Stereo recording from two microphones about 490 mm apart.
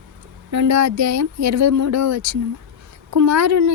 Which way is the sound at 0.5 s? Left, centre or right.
Right.